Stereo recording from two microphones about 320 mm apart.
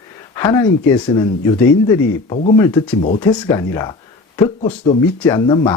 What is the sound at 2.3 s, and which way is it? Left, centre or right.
Speech, left.